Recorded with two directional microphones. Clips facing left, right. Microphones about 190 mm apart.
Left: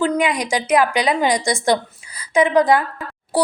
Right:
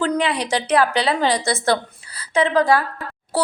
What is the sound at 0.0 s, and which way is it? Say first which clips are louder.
A woman's voice: left 2 dB; 10° left (ahead or behind).